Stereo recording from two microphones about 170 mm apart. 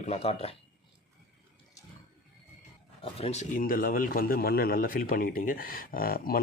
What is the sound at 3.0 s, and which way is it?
A man's voice, 35° left (ahead or behind).